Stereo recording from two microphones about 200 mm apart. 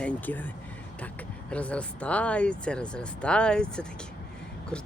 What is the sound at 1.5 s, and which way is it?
Speech, 5° left (ahead or behind).